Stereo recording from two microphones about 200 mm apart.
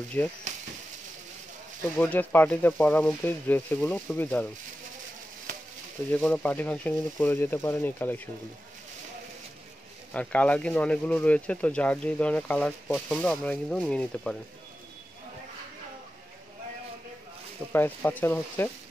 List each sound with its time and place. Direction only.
0.2 s speech: 10° left (ahead or behind)
2.0 s speech: 10° left (ahead or behind)
6.1 s speech: 5° left (ahead or behind)
10.1 s speech: 5° left (ahead or behind)
17.7 s speech: 10° left (ahead or behind)